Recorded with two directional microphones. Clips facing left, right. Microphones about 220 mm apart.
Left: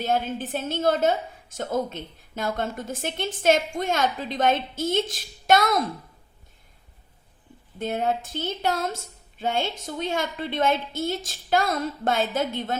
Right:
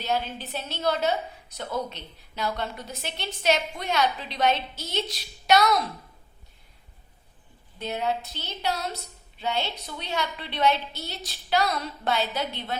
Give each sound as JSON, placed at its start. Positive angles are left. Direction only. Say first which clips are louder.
{"t": 0.0, "sound": "a woman's voice", "louder": "left 4 dB", "side_deg": 50}
{"t": 7.8, "sound": "a woman's voice", "louder": "left 3 dB", "side_deg": 50}